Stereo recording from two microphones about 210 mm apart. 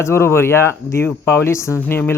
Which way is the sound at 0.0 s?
10° left (ahead or behind).